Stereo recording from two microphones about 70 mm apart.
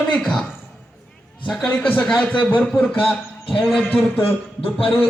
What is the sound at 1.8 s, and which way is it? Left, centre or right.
Speech, centre.